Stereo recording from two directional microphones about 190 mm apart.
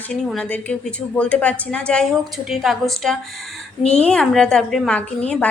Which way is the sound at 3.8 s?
35° left (ahead or behind).